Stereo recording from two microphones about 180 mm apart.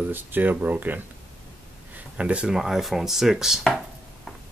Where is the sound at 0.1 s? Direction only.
10° right (ahead or behind).